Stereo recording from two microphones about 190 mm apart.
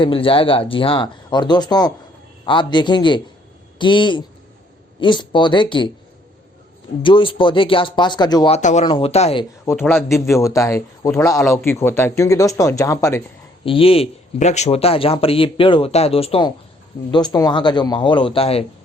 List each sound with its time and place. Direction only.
0.0 s speech: 30° left (ahead or behind)
7.0 s speech: 25° left (ahead or behind)
8.5 s speech: 35° left (ahead or behind)
9.6 s a man's voice: 10° left (ahead or behind)
13.7 s speech: 30° left (ahead or behind)